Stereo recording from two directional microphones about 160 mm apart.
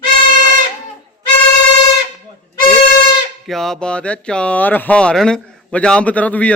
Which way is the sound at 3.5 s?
Centre (ahead or behind).